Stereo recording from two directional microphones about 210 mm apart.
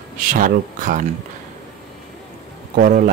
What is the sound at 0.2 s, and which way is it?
Speech, 40° right (ahead or behind).